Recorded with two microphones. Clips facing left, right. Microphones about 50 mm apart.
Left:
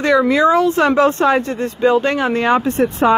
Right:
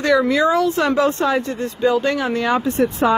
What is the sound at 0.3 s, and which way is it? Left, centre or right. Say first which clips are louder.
Speech: left 3 dB; left.